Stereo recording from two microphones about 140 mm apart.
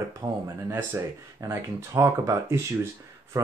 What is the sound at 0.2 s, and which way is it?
Speech, 20° right (ahead or behind).